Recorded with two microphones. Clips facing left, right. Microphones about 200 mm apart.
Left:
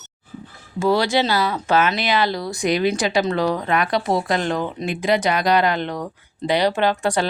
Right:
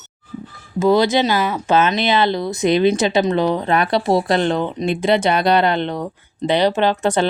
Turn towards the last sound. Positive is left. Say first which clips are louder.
# right 3 dB
turn(degrees=-20)  # may be behind; listen again after turning